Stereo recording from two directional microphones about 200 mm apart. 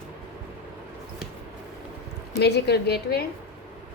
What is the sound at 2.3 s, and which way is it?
Speech, 55° left (ahead or behind).